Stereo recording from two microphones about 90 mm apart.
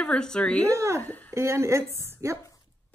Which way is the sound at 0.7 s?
35° right (ahead or behind).